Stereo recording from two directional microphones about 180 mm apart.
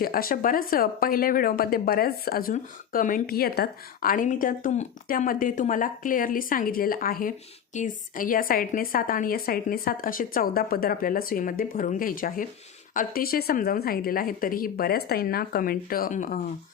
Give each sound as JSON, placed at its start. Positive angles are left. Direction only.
{"t": 0.0, "sound": "a woman's voice", "side_deg": 55}